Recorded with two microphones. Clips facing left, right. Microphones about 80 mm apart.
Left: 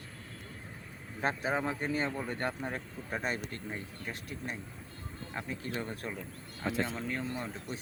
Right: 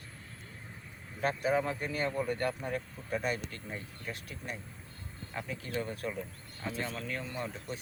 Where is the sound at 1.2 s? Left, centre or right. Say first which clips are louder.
Right 2 dB; left.